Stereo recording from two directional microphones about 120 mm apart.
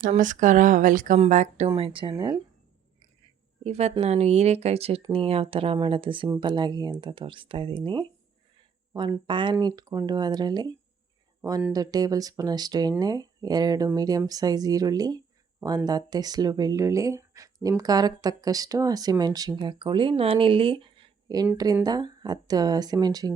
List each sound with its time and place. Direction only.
0.1 s speech: 90° right
1.3 s speech: 75° right (ahead or behind)
1.7 s speech: 45° right (ahead or behind)
2.1 s speech: 35° right (ahead or behind)
3.6 s speech: 65° right (ahead or behind); by 19.7 s 30° right (ahead or behind)
19.8 s speech: 45° right (ahead or behind)
21.3 s speech: 35° right (ahead or behind)